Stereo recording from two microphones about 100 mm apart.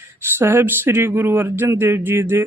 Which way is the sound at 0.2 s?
25° right (ahead or behind).